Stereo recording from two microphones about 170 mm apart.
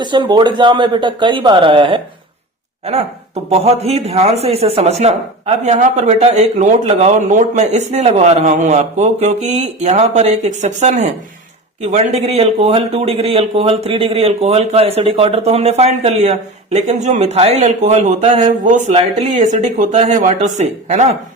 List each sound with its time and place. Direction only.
0.0 s speech: 25° right (ahead or behind)
3.5 s speech: 40° right (ahead or behind)